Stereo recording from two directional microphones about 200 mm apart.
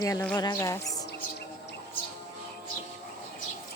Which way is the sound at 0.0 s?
15° left (ahead or behind).